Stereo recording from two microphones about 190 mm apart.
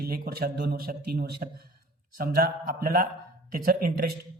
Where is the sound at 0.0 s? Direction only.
55° right (ahead or behind).